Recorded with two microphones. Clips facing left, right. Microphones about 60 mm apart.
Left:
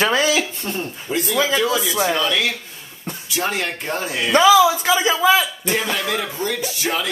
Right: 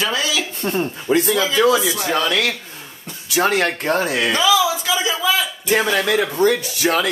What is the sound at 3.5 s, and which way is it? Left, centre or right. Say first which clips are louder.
Speech: right 6 dB; right.